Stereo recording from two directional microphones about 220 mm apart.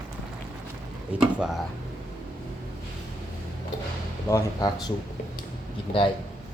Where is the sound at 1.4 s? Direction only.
Centre (ahead or behind).